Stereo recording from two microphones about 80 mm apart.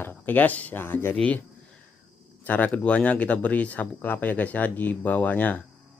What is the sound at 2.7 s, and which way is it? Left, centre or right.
Speech, centre.